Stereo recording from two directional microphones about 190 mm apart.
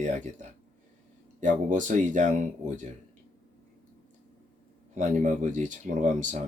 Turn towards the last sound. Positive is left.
turn(degrees=-40)  # may be behind; listen again after turning